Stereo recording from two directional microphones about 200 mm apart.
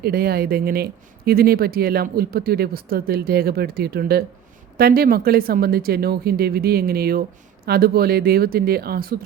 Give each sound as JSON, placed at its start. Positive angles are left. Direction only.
{"t": 0.0, "sound": "speech", "side_deg": -50}